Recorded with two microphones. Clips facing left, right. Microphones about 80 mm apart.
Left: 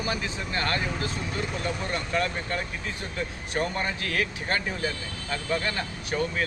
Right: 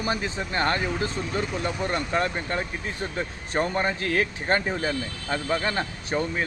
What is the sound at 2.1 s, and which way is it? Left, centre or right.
Speech, right.